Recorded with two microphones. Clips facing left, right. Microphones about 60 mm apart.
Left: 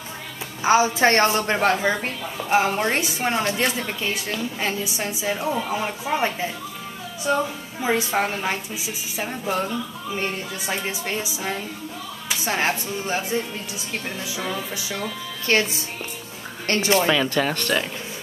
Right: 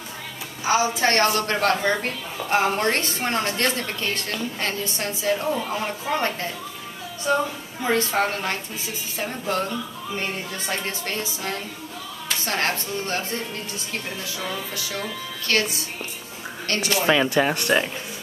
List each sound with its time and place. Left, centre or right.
0.9 s a woman's voice: left
17.0 s speech: centre